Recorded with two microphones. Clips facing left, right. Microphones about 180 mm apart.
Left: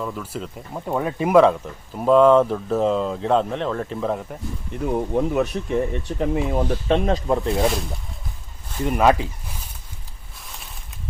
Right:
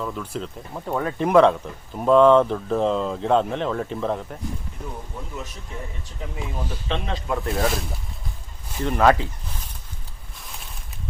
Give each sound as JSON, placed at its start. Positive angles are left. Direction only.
{"t": 0.0, "sound": "speech", "side_deg": 5}
{"t": 4.9, "sound": "speech", "side_deg": 70}
{"t": 7.5, "sound": "speech", "side_deg": 0}
{"t": 8.8, "sound": "speech", "side_deg": 10}